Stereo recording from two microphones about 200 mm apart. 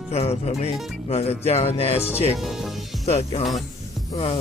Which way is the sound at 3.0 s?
30° left (ahead or behind).